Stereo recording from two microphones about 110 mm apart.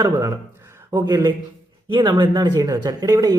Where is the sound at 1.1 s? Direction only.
40° right (ahead or behind).